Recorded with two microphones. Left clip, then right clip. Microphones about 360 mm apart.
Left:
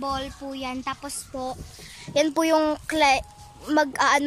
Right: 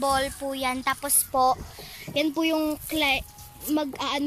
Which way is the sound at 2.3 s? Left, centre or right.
Left.